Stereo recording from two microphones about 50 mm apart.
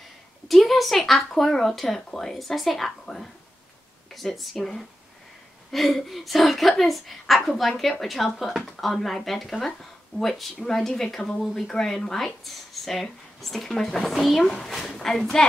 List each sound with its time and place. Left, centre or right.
0.5 s speech: centre